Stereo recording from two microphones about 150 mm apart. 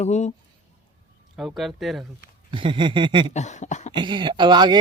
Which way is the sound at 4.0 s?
30° right (ahead or behind).